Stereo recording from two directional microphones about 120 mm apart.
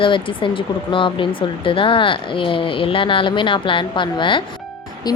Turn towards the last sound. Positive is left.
turn(degrees=35)  # may be behind; listen again after turning